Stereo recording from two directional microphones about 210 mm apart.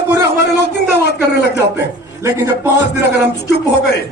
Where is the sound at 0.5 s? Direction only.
55° left (ahead or behind).